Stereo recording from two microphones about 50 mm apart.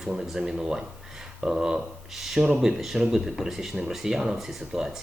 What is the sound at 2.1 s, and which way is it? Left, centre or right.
Speech, centre.